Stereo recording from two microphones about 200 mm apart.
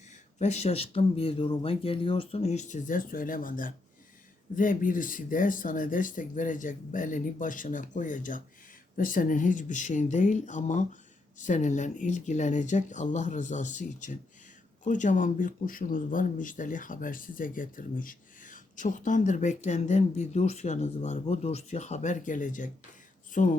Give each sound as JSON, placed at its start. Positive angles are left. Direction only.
{"t": 0.3, "sound": "speech", "side_deg": 35}